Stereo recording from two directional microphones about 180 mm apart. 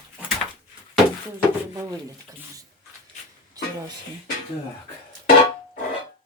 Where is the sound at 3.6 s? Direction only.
20° right (ahead or behind).